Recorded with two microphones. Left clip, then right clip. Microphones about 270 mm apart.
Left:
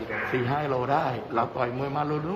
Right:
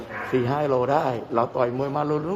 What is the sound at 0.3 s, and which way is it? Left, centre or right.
A man's voice, right.